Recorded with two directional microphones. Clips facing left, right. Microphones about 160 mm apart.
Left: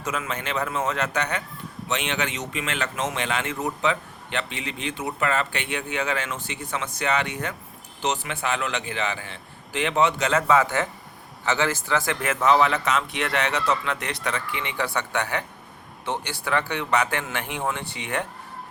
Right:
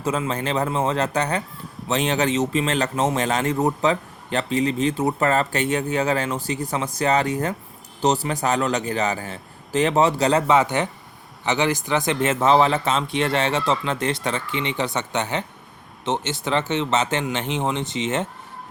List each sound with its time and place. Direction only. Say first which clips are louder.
0.0 s a man's voice: right 6 dB; 30° right (ahead or behind)
10.5 s a man's voice: right 2 dB; 20° right (ahead or behind)